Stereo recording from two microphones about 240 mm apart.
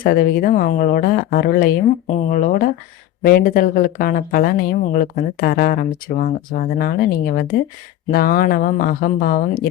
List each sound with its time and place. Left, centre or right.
0.0 s speech: left